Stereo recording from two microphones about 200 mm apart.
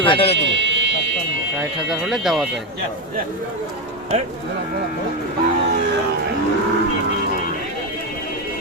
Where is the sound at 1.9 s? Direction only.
Centre (ahead or behind).